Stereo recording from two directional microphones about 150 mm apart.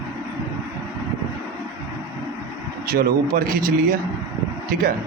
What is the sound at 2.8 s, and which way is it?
Speech, 90° right.